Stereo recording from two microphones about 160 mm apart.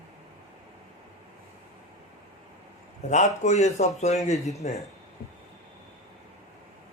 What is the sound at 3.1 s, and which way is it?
Speech, 50° left (ahead or behind).